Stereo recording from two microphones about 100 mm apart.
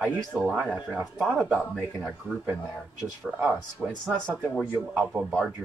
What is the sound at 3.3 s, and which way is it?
Speech, 5° right (ahead or behind).